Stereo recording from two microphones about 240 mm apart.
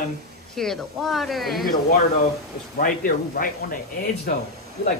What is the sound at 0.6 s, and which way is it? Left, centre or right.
A woman's voice, centre.